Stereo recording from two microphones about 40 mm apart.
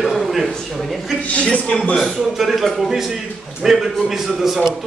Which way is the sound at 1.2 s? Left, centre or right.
Left.